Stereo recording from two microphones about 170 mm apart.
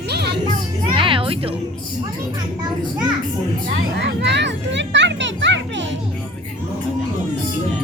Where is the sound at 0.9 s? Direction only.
30° right (ahead or behind).